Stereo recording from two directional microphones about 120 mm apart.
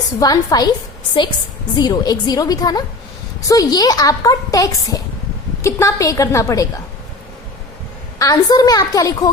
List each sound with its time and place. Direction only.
0.2 s a woman's voice: 35° left (ahead or behind)
1.7 s a woman's voice: 35° left (ahead or behind)
8.2 s a woman's voice: 30° left (ahead or behind)